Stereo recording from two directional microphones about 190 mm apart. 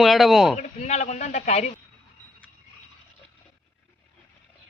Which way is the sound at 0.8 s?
40° left (ahead or behind).